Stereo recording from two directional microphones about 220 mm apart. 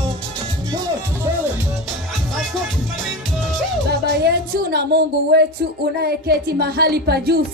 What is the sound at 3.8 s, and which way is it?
Speech, 45° right (ahead or behind).